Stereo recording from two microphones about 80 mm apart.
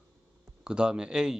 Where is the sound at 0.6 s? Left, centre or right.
Centre.